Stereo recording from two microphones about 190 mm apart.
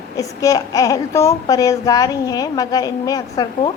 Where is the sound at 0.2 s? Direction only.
20° left (ahead or behind).